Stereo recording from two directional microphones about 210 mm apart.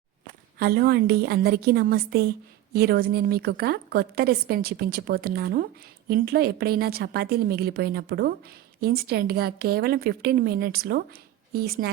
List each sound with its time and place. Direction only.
0.6 s a woman's voice: 50° right (ahead or behind)